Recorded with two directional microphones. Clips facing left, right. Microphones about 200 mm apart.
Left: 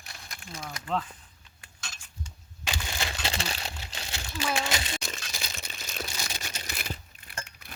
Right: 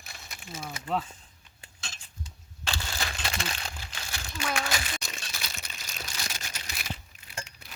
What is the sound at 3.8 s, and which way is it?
Crumpling, 25° left (ahead or behind).